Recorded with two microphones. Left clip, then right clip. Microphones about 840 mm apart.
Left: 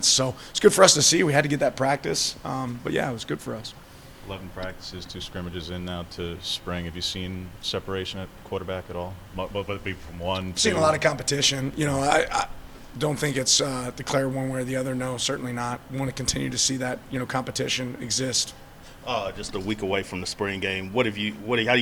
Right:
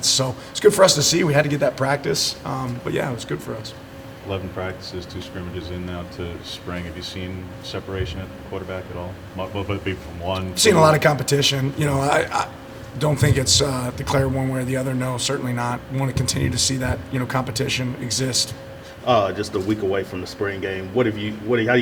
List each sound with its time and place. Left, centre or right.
0.0 s a man's voice: left
4.3 s speech: left
6.5 s a man's voice: left
9.6 s a man's voice: left
10.5 s a man's voice: left
19.0 s speech: left
19.9 s a man's voice: left